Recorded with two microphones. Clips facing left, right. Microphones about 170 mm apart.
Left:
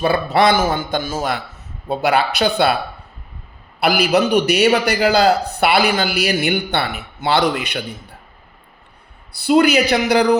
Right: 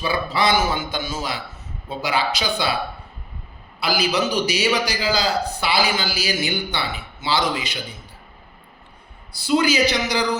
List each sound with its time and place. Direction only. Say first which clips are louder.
0.0 s a man's voice: left 6 dB; 60° left (ahead or behind)
3.8 s a man's voice: left 6 dB; 60° left (ahead or behind)
9.3 s a man's voice: left 6 dB; 60° left (ahead or behind)